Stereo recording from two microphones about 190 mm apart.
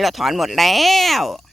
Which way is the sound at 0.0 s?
Centre (ahead or behind).